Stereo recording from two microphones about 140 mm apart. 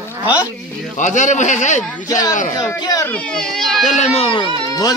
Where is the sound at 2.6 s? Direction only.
20° left (ahead or behind).